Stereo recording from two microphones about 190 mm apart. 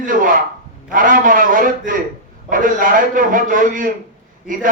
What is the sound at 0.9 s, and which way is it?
A man's voice, 45° right (ahead or behind).